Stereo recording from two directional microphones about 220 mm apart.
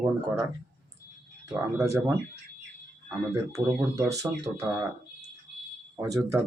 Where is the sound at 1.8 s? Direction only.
15° right (ahead or behind).